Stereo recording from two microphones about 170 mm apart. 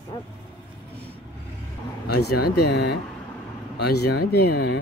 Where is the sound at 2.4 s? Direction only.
70° left (ahead or behind).